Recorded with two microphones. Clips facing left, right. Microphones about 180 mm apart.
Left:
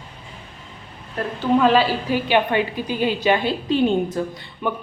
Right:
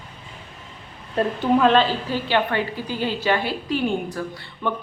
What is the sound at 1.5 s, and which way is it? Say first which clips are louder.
A woman's voice: left 1 dB; 5° left (ahead or behind).